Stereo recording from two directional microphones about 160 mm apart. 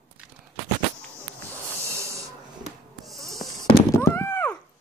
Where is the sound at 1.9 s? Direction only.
15° right (ahead or behind).